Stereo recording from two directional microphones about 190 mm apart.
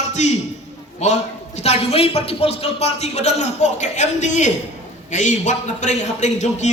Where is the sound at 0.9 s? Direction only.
35° left (ahead or behind).